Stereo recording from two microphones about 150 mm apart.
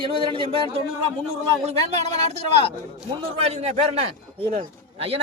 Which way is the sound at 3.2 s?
45° right (ahead or behind).